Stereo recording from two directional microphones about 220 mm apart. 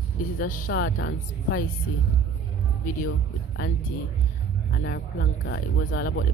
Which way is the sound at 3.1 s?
55° left (ahead or behind).